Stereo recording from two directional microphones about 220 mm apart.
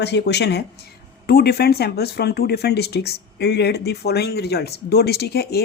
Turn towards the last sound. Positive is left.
turn(degrees=45)  # may be behind; listen again after turning